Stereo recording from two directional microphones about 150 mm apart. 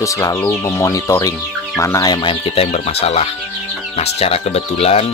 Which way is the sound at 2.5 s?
45° left (ahead or behind).